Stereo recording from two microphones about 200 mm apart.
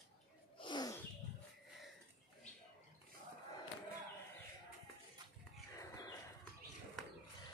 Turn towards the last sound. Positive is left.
turn(degrees=15)  # may be behind; listen again after turning